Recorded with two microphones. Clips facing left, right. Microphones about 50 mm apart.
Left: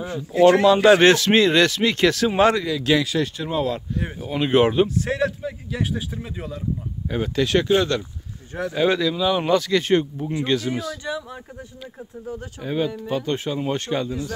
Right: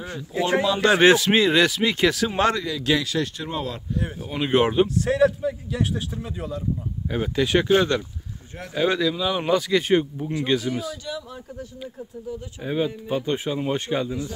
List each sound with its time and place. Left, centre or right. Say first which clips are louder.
0.7 s speech: left 5 dB; centre
1.0 s speech: left 1 dB; centre
2.2 s speech: left 4 dB; centre
7.4 s speech: even; centre
8.7 s speech: left 1 dB; centre
11.1 s speech: left 4 dB; left
12.6 s speech: left 1 dB; centre